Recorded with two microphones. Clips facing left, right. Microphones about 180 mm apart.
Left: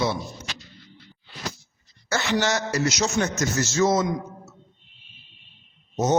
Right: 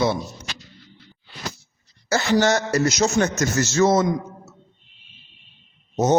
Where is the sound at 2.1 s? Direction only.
40° right (ahead or behind); by 4.0 s 60° right (ahead or behind).